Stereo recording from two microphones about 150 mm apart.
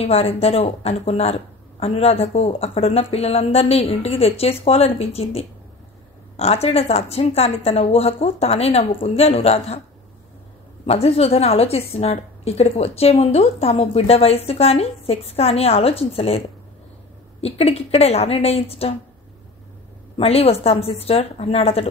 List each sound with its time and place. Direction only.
0.0 s a woman's voice: 45° left (ahead or behind)
10.9 s a woman's voice: 40° left (ahead or behind)
20.2 s a woman's voice: 40° left (ahead or behind)